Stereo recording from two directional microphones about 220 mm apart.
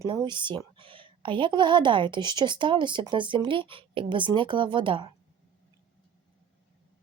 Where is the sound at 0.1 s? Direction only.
20° right (ahead or behind).